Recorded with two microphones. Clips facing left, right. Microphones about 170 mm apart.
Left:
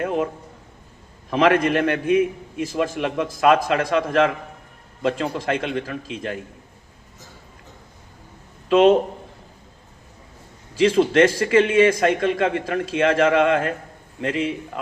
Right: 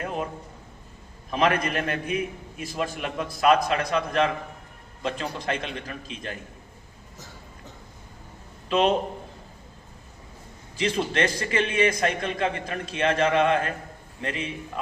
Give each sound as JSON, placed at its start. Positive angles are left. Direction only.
{"t": 1.3, "sound": "a man's voice", "side_deg": 90}
{"t": 8.7, "sound": "a man's voice", "side_deg": 90}
{"t": 10.8, "sound": "a man's voice", "side_deg": 90}